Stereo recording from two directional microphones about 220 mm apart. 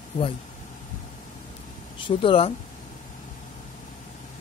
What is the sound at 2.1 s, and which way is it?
Speech, 25° left (ahead or behind).